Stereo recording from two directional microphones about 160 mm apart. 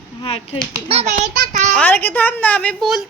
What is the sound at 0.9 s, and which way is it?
Speech, 45° right (ahead or behind).